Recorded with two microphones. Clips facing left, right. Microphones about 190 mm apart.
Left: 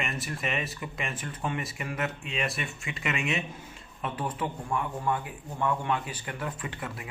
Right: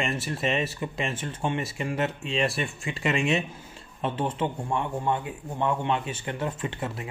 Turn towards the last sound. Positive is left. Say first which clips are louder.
# right 5 dB
turn(degrees=-25)  # may be behind; listen again after turning